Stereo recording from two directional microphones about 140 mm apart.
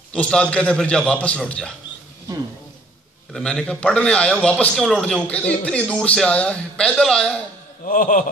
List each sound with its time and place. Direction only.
0.1 s a man's voice: 10° left (ahead or behind)
3.3 s a man's voice: 5° left (ahead or behind)
7.8 s speech: 75° left (ahead or behind)